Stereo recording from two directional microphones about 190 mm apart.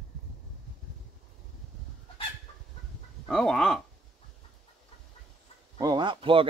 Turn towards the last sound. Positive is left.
turn(degrees=-25)  # may be behind; listen again after turning